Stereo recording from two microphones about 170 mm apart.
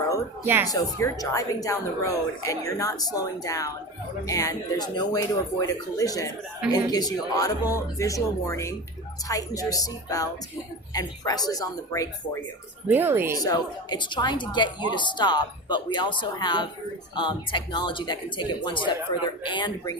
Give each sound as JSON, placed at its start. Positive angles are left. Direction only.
{"t": 0.4, "sound": "speech", "side_deg": -10}
{"t": 0.7, "sound": "a woman's voice", "side_deg": 20}
{"t": 12.9, "sound": "speech", "side_deg": -10}
{"t": 13.4, "sound": "a woman's voice", "side_deg": 25}